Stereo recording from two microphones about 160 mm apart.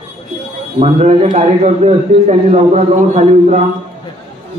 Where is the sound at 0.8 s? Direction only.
40° right (ahead or behind).